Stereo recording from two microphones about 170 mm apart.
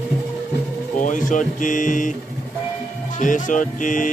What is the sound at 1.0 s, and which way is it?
Speech, 50° left (ahead or behind).